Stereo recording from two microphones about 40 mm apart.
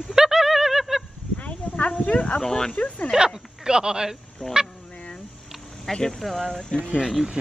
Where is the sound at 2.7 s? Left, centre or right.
Left.